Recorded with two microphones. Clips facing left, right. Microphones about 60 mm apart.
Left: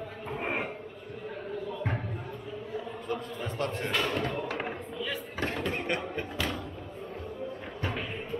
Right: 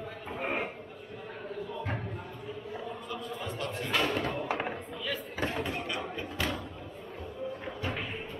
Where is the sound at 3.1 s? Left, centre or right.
Left.